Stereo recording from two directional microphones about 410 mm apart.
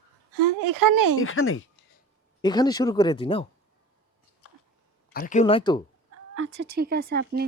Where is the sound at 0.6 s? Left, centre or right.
Right.